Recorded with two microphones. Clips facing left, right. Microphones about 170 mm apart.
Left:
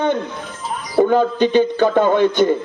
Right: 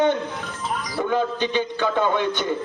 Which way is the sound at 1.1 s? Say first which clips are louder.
Left 4 dB; 45° left (ahead or behind).